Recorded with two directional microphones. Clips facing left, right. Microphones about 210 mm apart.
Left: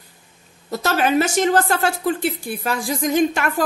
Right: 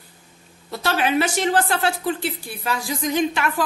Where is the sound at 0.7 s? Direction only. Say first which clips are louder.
Left 3 dB; 45° left (ahead or behind).